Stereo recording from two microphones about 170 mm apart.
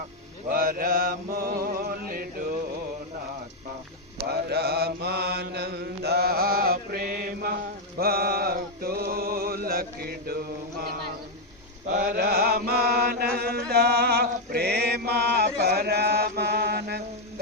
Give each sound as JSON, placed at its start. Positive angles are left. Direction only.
{"t": 0.5, "sound": "mantra", "side_deg": -60}
{"t": 4.2, "sound": "mantra", "side_deg": -70}
{"t": 7.9, "sound": "music", "side_deg": -65}
{"t": 11.9, "sound": "chant", "side_deg": -50}